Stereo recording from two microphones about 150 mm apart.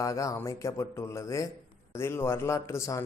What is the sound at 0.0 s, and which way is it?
A man's voice, 20° left (ahead or behind).